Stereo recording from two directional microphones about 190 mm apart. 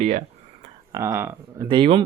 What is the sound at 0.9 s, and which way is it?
Speech, 15° right (ahead or behind).